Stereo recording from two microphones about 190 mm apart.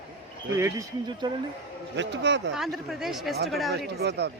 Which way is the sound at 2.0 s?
70° right (ahead or behind).